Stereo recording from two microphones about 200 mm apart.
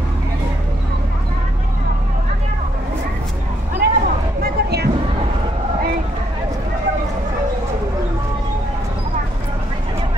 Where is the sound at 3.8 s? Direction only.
50° right (ahead or behind).